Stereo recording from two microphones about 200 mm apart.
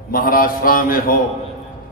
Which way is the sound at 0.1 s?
45° left (ahead or behind).